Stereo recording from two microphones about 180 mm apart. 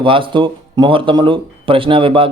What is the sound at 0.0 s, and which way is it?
Speech, 30° right (ahead or behind).